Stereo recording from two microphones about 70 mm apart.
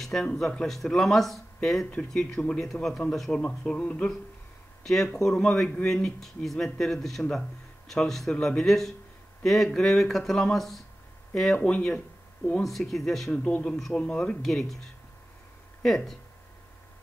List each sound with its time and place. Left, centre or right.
0.0 s speech: centre
3.3 s speech: centre
4.8 s speech: centre
11.5 s speech: centre
12.6 s speech: centre
13.3 s speech: centre
14.4 s speech: centre
15.8 s speech: centre